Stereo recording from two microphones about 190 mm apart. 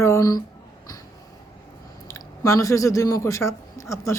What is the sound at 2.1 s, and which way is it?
Speech, 15° left (ahead or behind).